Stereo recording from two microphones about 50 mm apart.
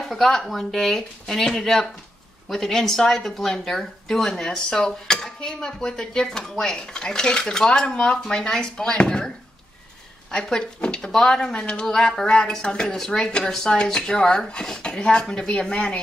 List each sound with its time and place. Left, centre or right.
0.1 s speech: centre
2.4 s dishes: centre
10.3 s dishes: centre